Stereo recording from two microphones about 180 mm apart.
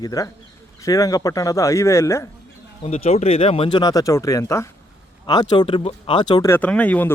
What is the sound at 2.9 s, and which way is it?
Speech, 35° left (ahead or behind).